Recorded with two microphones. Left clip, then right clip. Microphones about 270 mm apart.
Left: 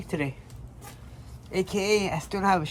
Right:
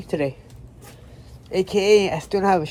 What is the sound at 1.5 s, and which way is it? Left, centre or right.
Speech, centre.